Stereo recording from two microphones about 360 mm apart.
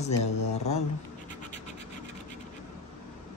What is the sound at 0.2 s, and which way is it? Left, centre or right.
Speech, centre.